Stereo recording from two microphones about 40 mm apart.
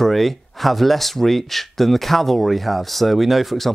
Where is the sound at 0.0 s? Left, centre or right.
Centre.